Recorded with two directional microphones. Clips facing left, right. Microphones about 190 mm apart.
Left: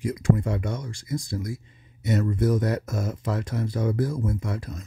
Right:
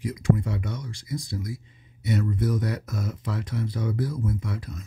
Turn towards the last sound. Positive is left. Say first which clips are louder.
# left 2 dB
turn(degrees=45)  # may be behind; listen again after turning